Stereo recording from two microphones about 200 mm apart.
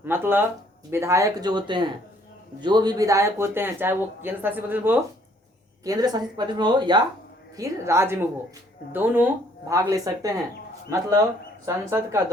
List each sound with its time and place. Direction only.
0.0 s speech: 10° right (ahead or behind)